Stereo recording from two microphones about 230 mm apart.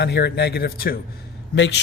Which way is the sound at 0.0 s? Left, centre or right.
Left.